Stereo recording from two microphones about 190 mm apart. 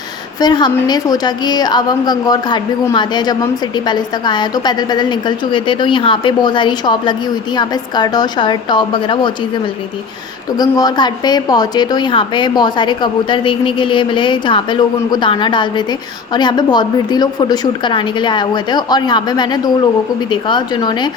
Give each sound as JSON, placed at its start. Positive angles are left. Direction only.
{"t": 0.3, "sound": "a woman's voice", "side_deg": 20}
{"t": 10.6, "sound": "a woman's voice", "side_deg": 20}